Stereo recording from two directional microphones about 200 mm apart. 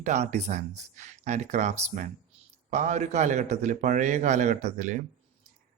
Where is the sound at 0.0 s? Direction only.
35° right (ahead or behind).